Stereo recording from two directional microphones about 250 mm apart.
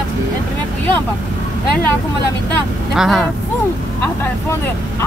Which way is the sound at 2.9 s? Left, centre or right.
Centre.